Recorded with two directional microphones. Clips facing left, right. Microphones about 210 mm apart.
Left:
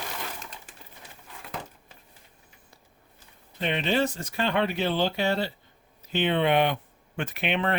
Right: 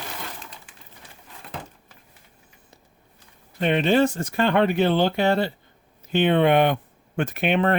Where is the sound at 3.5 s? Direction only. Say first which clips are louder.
Right 7 dB; 50° right (ahead or behind).